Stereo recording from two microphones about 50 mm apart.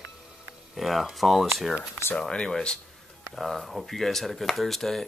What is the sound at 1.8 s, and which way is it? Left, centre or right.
Speech, left.